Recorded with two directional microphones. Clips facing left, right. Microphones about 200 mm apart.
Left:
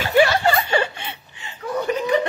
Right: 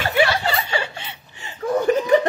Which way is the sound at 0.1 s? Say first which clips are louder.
Left 5 dB; 45° left (ahead or behind).